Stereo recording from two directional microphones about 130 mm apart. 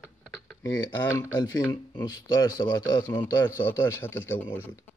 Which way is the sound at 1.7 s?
30° left (ahead or behind).